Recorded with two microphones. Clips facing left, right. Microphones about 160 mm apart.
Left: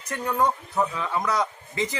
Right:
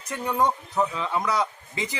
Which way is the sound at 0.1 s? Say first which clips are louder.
Even; 15° right (ahead or behind).